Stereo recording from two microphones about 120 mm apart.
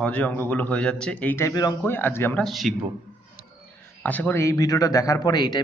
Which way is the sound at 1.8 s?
15° left (ahead or behind).